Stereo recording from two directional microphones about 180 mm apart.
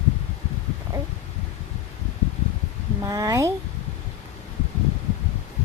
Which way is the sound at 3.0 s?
20° right (ahead or behind).